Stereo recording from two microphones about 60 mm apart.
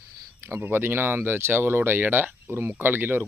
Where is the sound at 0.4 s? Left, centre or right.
Right.